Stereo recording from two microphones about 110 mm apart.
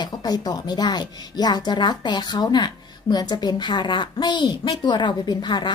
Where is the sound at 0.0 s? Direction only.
40° left (ahead or behind).